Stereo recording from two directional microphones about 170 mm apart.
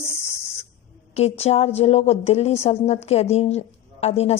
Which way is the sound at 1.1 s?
40° left (ahead or behind).